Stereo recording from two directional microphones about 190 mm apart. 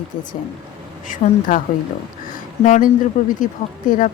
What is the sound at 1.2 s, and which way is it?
Speech, 40° left (ahead or behind).